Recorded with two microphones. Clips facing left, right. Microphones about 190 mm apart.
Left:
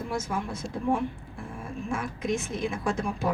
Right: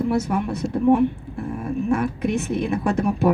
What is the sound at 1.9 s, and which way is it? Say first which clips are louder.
A woman's voice: right 7 dB; 65° right (ahead or behind).